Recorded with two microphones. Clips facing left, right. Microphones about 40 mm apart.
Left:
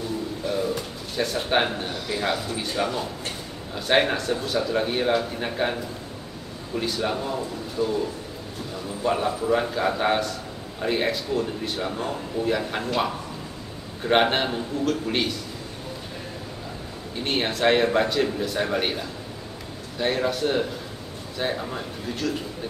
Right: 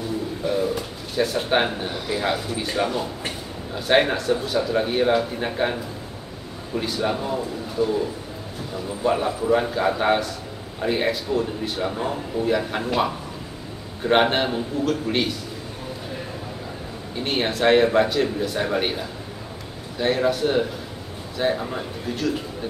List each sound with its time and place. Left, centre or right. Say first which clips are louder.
0.4 s bird: right 3 dB; centre
2.0 s a man's voice: right 2 dB; centre
17.1 s a man's voice: right 2 dB; centre